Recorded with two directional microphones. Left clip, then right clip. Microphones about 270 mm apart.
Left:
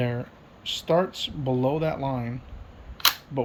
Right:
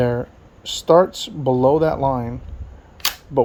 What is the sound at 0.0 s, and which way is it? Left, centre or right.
Speech, right.